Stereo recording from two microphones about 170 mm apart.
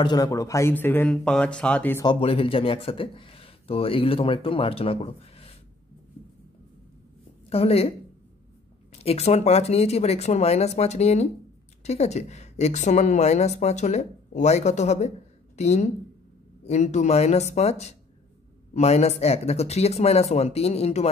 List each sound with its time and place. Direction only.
0.0 s speech: 20° left (ahead or behind)
2.0 s speech: 35° left (ahead or behind)
7.4 s a woman's voice: 35° left (ahead or behind)
8.9 s speech: 40° left (ahead or behind)